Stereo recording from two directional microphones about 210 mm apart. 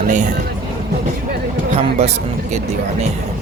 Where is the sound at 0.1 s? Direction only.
35° right (ahead or behind).